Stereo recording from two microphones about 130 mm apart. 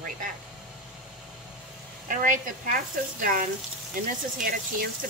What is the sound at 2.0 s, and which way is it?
Speech, 90° right.